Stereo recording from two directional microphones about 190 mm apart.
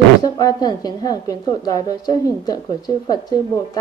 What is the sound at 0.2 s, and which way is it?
A woman's voice, 20° left (ahead or behind).